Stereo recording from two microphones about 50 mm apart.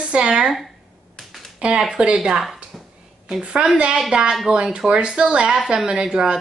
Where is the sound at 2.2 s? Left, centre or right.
Centre.